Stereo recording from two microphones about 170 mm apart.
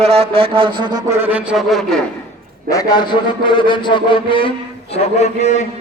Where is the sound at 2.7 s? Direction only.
20° left (ahead or behind).